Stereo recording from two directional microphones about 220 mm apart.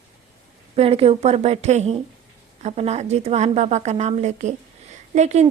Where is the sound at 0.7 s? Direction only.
25° right (ahead or behind).